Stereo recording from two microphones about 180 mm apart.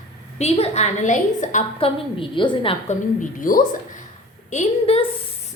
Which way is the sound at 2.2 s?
25° left (ahead or behind).